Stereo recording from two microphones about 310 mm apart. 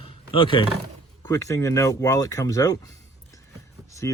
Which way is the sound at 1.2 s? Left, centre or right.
Centre.